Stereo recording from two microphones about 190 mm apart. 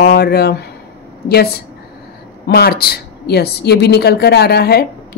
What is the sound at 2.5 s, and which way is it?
Speech, 55° left (ahead or behind).